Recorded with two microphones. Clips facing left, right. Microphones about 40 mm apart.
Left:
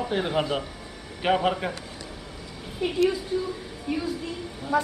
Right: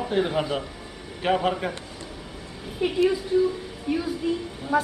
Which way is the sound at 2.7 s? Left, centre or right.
Centre.